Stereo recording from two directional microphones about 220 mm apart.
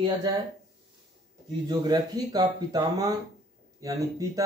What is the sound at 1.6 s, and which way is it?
Speech, 20° right (ahead or behind).